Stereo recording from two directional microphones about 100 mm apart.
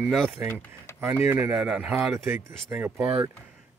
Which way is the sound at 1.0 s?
25° right (ahead or behind).